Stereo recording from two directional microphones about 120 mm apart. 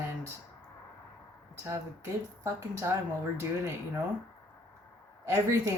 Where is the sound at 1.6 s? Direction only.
25° right (ahead or behind).